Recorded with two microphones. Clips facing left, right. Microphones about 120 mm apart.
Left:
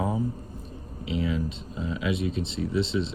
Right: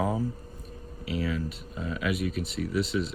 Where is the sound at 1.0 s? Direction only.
25° left (ahead or behind).